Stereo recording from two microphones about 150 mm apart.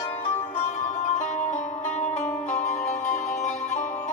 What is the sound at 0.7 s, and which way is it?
Music, 50° left (ahead or behind).